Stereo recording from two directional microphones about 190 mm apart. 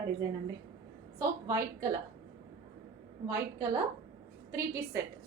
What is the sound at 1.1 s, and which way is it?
Speech, 15° right (ahead or behind).